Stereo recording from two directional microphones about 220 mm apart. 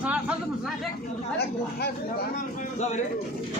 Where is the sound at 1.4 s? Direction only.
45° left (ahead or behind).